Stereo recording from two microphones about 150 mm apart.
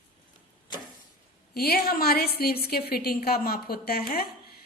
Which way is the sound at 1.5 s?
90° left.